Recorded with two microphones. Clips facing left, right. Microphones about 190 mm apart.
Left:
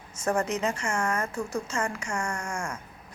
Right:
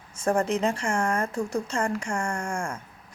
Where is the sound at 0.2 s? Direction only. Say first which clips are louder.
Right 3 dB; 30° right (ahead or behind).